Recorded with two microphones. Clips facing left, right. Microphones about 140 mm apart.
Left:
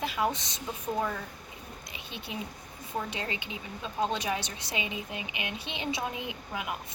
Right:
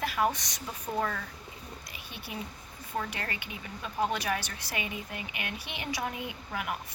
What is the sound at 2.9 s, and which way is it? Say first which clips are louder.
Speech: left 1 dB; 20° left (ahead or behind).